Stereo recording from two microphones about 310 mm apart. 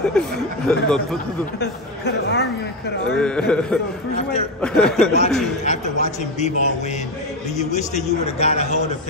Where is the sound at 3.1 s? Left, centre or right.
Centre.